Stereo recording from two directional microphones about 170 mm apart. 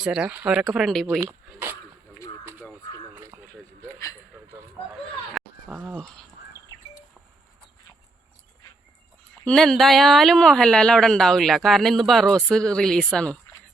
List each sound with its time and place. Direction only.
0.0 s speech: 5° right (ahead or behind)
1.0 s speech: 10° right (ahead or behind)
2.4 s crow: 15° right (ahead or behind)
3.2 s a sound: 15° right (ahead or behind)
4.9 s a sound: centre (ahead or behind)
9.4 s speech: 5° left (ahead or behind)